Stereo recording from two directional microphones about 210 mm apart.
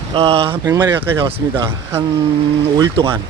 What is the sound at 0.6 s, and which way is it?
Speech, 10° right (ahead or behind).